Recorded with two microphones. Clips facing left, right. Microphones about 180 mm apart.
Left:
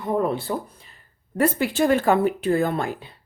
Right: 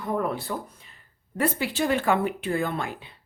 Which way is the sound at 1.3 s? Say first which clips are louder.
Left 5 dB; 45° left (ahead or behind).